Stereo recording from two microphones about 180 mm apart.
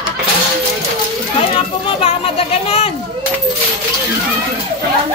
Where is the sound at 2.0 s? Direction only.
30° left (ahead or behind).